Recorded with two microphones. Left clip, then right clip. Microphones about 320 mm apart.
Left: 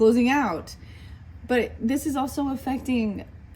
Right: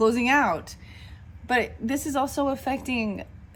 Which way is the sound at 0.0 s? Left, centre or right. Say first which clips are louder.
Left 1 dB; right.